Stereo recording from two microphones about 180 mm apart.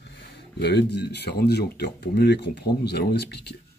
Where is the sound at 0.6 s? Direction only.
70° left (ahead or behind).